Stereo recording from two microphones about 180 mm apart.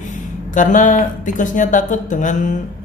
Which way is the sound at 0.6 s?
45° left (ahead or behind).